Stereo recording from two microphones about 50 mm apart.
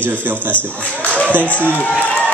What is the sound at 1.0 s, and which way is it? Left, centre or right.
Music, left.